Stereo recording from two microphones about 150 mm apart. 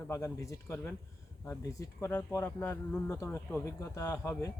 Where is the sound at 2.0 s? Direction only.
15° left (ahead or behind).